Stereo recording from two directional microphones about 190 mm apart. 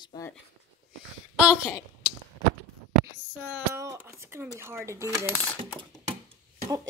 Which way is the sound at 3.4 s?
10° right (ahead or behind).